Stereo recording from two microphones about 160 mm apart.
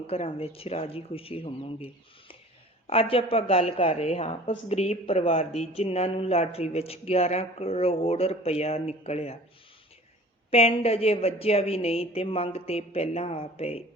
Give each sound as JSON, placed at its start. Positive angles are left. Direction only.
{"t": 0.1, "sound": "a woman's voice", "side_deg": 35}
{"t": 10.5, "sound": "a woman's voice", "side_deg": 40}